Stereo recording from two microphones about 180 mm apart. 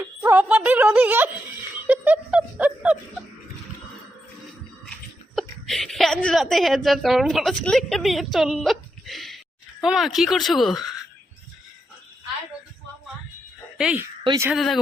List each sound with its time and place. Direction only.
0.0 s a sound: 10° right (ahead or behind)
1.9 s speech: 10° right (ahead or behind)
5.3 s a woman's voice: centre (ahead or behind)
13.7 s speech: 5° right (ahead or behind)
14.3 s speech: 15° right (ahead or behind)
14.5 s speech: centre (ahead or behind)